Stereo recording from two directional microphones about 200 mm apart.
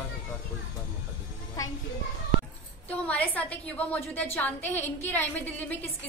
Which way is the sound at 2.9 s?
10° left (ahead or behind).